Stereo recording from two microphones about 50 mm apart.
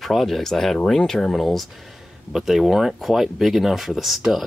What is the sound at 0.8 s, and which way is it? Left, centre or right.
Speech, centre.